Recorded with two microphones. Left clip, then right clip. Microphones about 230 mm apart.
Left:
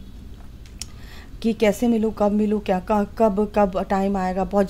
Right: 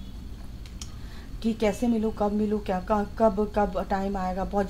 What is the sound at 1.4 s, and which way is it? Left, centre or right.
A woman's voice, left.